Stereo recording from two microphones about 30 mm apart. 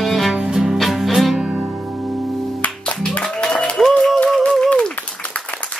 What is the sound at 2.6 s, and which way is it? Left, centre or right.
Music, left.